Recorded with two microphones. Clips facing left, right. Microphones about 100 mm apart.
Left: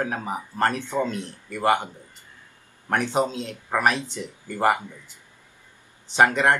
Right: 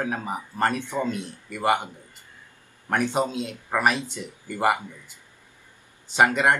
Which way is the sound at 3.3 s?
10° right (ahead or behind).